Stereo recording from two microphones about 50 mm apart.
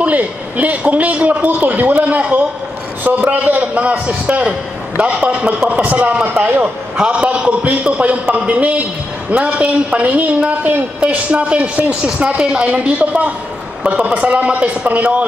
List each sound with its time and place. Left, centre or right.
0.0 s a man's voice: right
4.5 s a woman's voice: right
6.2 s a man's voice: right
7.0 s a woman's voice: right